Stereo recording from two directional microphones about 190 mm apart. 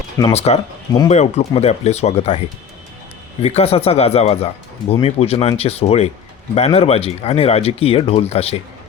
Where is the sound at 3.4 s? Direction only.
35° left (ahead or behind).